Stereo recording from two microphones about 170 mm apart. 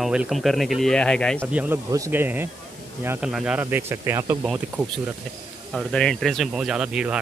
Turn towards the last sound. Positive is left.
turn(degrees=-5)  # may be behind; listen again after turning